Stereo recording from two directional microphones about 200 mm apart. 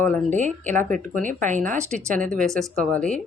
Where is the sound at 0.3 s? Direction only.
40° right (ahead or behind).